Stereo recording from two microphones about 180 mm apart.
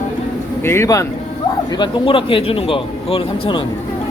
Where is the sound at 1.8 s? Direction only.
30° left (ahead or behind).